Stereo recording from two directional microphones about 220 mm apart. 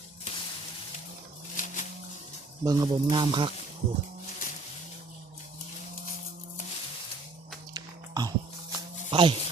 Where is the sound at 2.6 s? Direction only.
20° right (ahead or behind).